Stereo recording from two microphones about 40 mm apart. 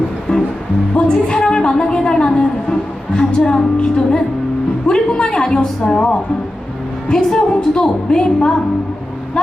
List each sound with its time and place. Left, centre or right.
0.3 s music: left
0.9 s a sound: left
5.9 s a woman's voice: centre